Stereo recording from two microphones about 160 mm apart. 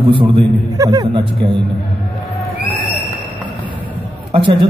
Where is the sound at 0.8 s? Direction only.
25° right (ahead or behind).